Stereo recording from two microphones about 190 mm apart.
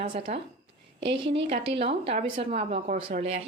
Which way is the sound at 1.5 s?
30° right (ahead or behind).